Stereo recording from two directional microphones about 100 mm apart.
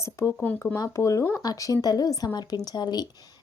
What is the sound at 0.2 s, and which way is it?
Speech, 30° left (ahead or behind).